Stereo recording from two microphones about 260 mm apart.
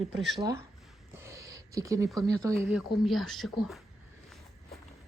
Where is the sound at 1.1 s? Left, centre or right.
Centre.